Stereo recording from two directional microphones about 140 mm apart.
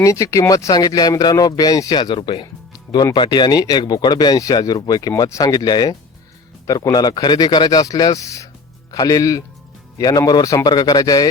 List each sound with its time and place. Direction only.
0.0 s speech: 25° left (ahead or behind)